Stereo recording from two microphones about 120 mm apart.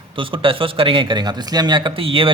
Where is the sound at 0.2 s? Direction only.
45° right (ahead or behind).